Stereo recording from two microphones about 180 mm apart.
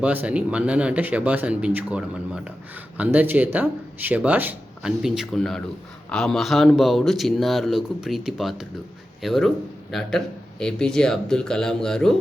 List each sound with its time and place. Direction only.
0.0 s speech: 10° right (ahead or behind)